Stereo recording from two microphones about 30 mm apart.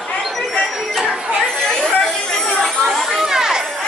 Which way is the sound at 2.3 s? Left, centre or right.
Centre.